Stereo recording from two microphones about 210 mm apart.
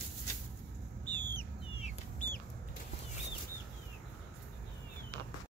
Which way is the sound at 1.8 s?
40° left (ahead or behind).